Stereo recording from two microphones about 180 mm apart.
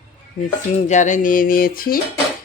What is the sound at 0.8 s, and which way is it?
Speech, 40° left (ahead or behind).